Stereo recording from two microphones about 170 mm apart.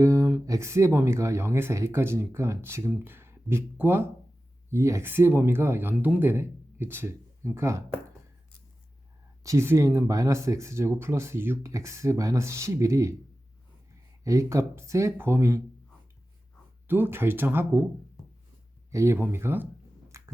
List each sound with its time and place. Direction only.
0.0 s speech: 20° right (ahead or behind)
9.4 s speech: 15° right (ahead or behind)
14.3 s speech: 20° right (ahead or behind)
16.8 s speech: 10° right (ahead or behind)
18.9 s speech: 15° right (ahead or behind)
20.1 s biting: 15° right (ahead or behind)